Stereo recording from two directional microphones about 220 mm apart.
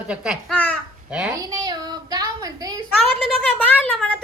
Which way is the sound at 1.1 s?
5° right (ahead or behind).